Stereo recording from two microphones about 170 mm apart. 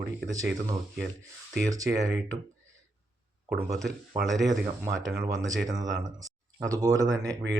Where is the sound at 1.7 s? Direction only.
20° right (ahead or behind).